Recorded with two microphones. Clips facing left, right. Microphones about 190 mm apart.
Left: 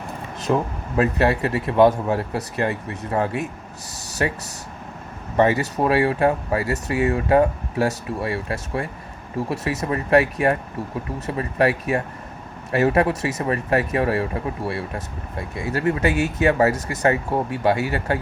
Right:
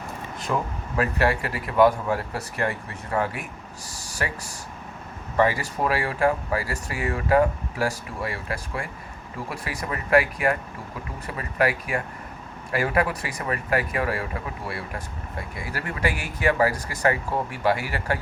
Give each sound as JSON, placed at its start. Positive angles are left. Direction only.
{"t": 0.4, "sound": "speech", "side_deg": 25}
{"t": 5.4, "sound": "speech", "side_deg": 25}